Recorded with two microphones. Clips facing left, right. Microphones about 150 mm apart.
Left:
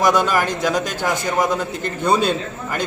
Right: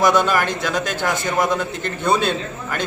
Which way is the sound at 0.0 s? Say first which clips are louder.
Even; 10° left (ahead or behind).